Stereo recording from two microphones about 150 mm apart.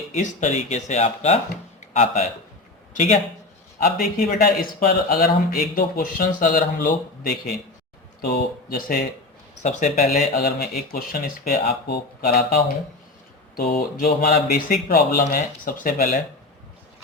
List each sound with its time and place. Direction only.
0.2 s speech: 55° left (ahead or behind)
4.2 s speech: 80° left
8.2 s speech: 90° left
9.6 s speech: 55° left (ahead or behind)
10.1 s speech: 85° left; by 16.2 s 65° left (ahead or behind)